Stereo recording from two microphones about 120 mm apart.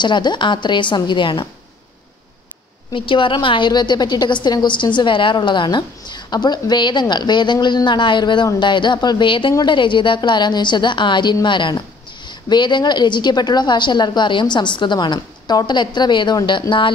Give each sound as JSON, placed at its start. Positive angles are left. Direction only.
{"t": 0.0, "sound": "a woman's voice", "side_deg": 40}
{"t": 2.9, "sound": "a woman's voice", "side_deg": 45}